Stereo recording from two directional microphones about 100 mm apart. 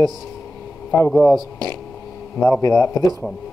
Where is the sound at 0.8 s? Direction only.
10° left (ahead or behind).